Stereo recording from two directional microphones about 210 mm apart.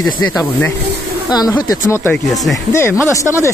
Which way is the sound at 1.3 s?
20° left (ahead or behind).